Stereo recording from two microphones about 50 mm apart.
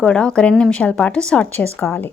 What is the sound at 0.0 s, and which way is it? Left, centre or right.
A woman's voice, centre.